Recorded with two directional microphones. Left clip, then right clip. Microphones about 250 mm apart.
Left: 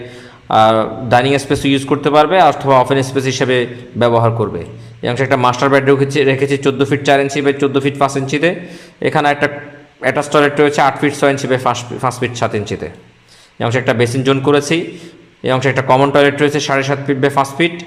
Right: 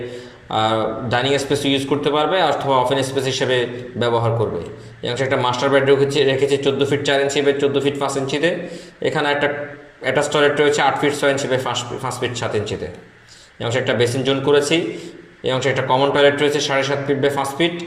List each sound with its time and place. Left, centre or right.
0.5 s a man's voice: left
13.7 s a man's voice: left